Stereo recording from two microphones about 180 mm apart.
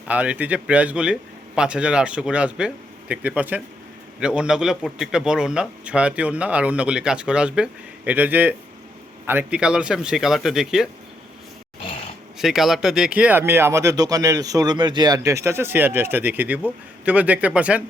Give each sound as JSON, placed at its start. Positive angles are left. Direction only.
{"t": 0.1, "sound": "a man's voice", "side_deg": -10}
{"t": 12.4, "sound": "speech", "side_deg": 0}